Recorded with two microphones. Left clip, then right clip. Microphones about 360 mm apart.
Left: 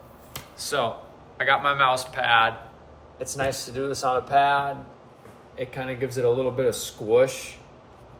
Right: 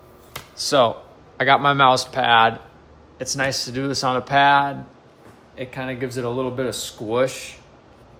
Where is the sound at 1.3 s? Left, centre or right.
Centre.